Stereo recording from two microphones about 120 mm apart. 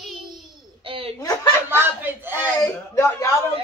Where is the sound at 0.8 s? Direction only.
50° right (ahead or behind).